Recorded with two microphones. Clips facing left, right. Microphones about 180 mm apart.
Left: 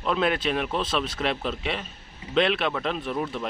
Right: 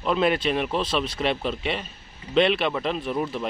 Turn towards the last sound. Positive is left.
turn(degrees=0)  # may be behind; listen again after turning